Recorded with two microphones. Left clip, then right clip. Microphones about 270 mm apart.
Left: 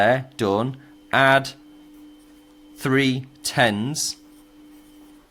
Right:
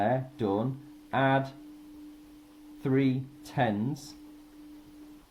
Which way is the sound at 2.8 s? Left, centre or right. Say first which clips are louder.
Left 8 dB; left.